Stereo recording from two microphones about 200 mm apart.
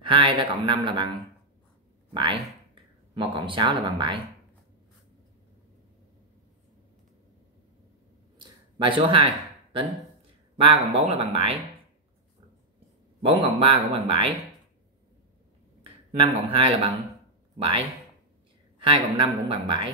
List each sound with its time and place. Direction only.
0.0 s speech: 25° right (ahead or behind)
2.1 s speech: 25° right (ahead or behind)
8.4 s a sound: 25° right (ahead or behind)
10.6 s speech: 30° right (ahead or behind)
13.2 s speech: 30° right (ahead or behind)
16.2 s speech: 25° right (ahead or behind)